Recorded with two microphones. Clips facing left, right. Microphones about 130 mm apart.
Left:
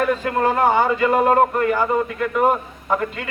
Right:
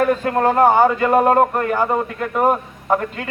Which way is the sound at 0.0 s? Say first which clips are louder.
Right 3 dB; 45° right (ahead or behind).